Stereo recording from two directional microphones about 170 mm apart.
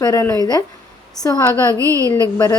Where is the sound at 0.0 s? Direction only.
15° left (ahead or behind).